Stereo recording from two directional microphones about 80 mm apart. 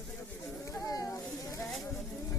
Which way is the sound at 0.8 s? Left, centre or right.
Left.